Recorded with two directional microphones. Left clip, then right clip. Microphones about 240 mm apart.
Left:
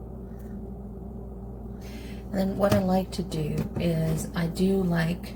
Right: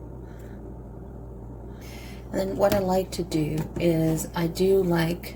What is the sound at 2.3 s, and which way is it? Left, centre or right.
Speech, right.